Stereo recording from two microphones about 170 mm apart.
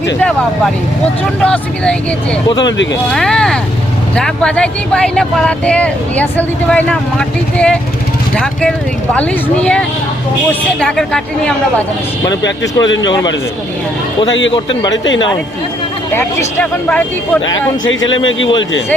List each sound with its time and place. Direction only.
0.2 s speech: 5° left (ahead or behind)
2.5 s a man's voice: 25° left (ahead or behind)
3.1 s speech: 5° left (ahead or behind)
9.1 s speech: 5° left (ahead or behind)
12.4 s speech: 90° left
13.1 s a man's voice: 25° left (ahead or behind)
14.3 s speech: 90° left
14.5 s a man's voice: 25° left (ahead or behind)
15.0 s speech: 90° left
16.1 s speech: 10° left (ahead or behind)